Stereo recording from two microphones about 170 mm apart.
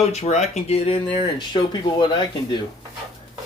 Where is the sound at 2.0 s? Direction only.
25° left (ahead or behind).